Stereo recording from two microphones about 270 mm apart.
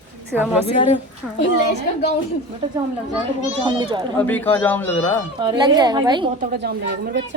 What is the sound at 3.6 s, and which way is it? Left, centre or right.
Speech, centre.